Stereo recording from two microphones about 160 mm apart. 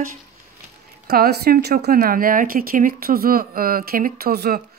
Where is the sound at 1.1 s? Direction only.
80° right.